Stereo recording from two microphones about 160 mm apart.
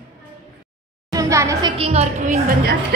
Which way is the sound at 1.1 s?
20° right (ahead or behind).